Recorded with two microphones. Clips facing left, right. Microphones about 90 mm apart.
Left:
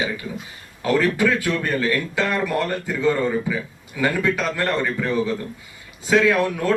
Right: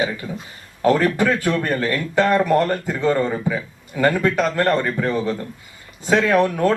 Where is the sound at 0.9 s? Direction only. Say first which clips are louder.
Right 2 dB; 40° right (ahead or behind).